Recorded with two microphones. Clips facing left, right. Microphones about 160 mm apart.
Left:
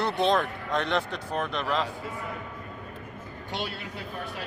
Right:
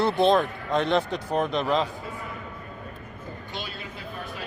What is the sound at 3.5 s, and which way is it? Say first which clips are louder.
Speech: left 5 dB; 75° left (ahead or behind).